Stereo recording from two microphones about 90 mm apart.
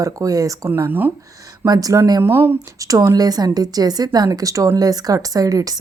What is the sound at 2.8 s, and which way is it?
Speech, 40° right (ahead or behind).